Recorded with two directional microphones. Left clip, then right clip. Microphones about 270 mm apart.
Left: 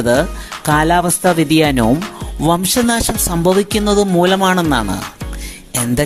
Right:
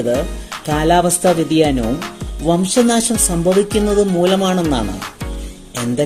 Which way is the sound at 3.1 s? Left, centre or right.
Centre.